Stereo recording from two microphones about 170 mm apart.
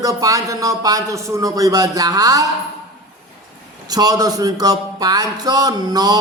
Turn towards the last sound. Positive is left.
turn(degrees=-20)  # may be behind; listen again after turning